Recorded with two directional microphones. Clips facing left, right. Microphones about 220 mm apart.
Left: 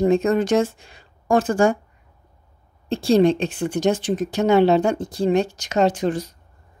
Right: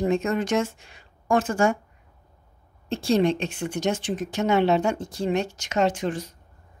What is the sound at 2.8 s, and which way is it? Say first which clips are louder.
A woman's voice: left 5 dB; 35° left (ahead or behind).